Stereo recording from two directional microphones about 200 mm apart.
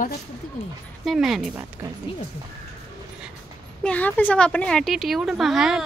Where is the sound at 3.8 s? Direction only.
5° left (ahead or behind).